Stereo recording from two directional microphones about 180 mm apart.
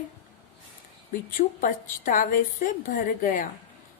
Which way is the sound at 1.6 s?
45° left (ahead or behind).